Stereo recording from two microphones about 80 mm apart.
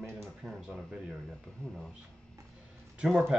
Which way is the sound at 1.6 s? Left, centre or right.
Centre.